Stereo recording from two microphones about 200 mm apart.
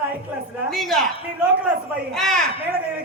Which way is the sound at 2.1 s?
Centre (ahead or behind).